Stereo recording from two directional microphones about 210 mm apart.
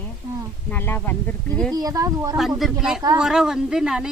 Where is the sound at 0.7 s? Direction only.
10° left (ahead or behind).